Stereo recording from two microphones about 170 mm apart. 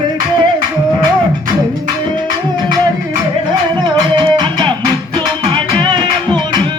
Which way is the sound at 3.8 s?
25° right (ahead or behind).